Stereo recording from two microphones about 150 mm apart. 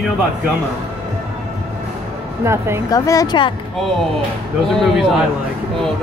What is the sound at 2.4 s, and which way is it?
Speech, 15° right (ahead or behind).